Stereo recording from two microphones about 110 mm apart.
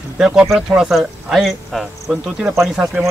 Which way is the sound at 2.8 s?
20° right (ahead or behind).